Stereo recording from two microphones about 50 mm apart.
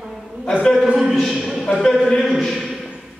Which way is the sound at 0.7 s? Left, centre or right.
Centre.